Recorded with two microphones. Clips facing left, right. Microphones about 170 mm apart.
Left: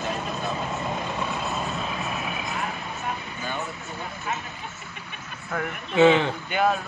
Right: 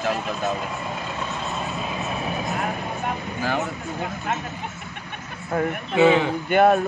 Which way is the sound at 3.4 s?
75° right (ahead or behind).